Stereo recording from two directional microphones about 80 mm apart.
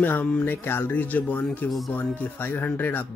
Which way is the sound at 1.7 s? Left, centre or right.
Centre.